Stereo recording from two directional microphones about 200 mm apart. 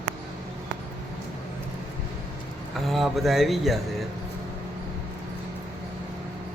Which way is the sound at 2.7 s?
Centre (ahead or behind).